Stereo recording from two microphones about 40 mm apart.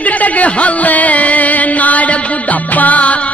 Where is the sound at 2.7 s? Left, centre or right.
Left.